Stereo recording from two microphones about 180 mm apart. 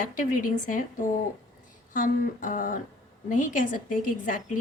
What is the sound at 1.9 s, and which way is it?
Speech, 45° left (ahead or behind).